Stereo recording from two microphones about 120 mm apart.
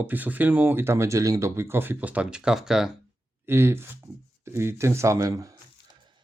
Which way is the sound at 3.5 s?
20° right (ahead or behind).